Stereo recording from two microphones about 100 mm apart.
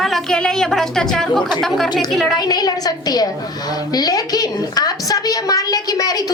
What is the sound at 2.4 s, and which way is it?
A woman's voice, 40° left (ahead or behind).